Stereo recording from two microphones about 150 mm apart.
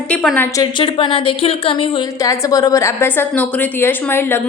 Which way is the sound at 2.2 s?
25° left (ahead or behind).